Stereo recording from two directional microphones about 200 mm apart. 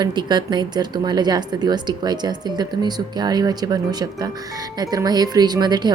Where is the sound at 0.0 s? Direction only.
20° right (ahead or behind).